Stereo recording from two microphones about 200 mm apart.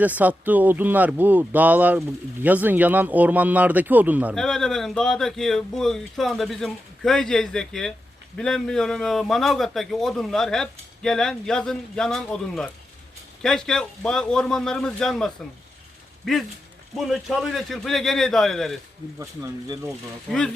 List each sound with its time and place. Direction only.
0.0 s a man's voice: 10° right (ahead or behind)
19.2 s speech: 15° right (ahead or behind)